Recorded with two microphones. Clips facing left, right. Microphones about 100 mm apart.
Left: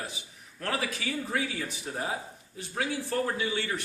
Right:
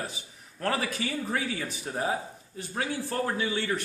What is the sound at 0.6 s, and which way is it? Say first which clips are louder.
Speech: right 3 dB; 40° right (ahead or behind).